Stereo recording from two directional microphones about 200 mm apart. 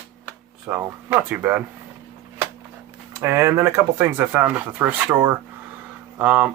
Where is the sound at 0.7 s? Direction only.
10° right (ahead or behind).